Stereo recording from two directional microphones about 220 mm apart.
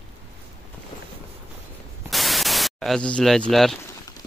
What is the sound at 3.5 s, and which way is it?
Speech, centre (ahead or behind).